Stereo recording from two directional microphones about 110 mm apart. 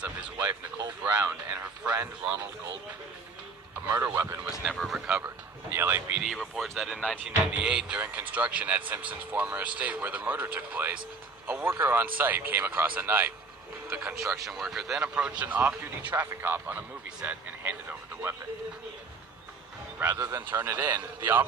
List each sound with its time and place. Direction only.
1.0 s speech: 15° right (ahead or behind)
3.8 s speech: 30° right (ahead or behind)
4.6 s speech: centre (ahead or behind)
5.7 s speech: 20° right (ahead or behind)
6.1 s speech: centre (ahead or behind); by 14.2 s 15° right (ahead or behind)
14.4 s speech: centre (ahead or behind)
20.0 s speech: 20° right (ahead or behind)